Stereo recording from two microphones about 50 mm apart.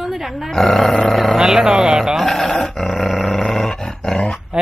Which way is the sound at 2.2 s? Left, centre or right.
Centre.